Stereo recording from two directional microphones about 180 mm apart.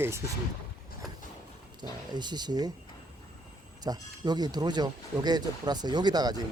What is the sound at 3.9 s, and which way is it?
Speech, 20° right (ahead or behind).